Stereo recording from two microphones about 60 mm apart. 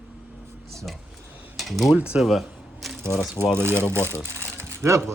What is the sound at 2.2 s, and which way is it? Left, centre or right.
Speech, centre.